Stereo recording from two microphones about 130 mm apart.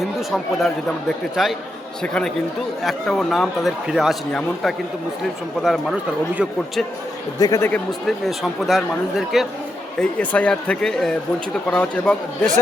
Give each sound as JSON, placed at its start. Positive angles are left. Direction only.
{"t": 0.0, "sound": "speech", "side_deg": 0}
{"t": 7.3, "sound": "speech", "side_deg": 25}
{"t": 8.0, "sound": "speech", "side_deg": 0}
{"t": 10.0, "sound": "speech", "side_deg": 10}